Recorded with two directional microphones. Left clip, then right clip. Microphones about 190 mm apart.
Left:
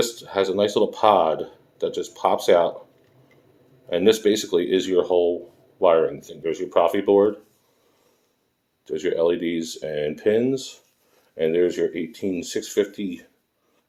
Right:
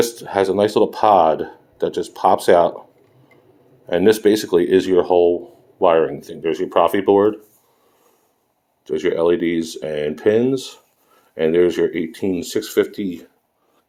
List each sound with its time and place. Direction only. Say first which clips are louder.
0.2 s speech: right 4 dB; 45° right (ahead or behind)
3.8 s speech: right 4 dB; 35° right (ahead or behind)
8.8 s speech: right 4 dB; 35° right (ahead or behind)